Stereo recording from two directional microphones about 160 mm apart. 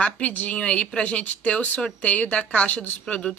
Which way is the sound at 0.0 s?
10° left (ahead or behind).